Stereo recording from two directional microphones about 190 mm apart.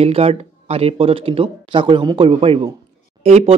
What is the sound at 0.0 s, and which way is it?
Speech, 30° right (ahead or behind).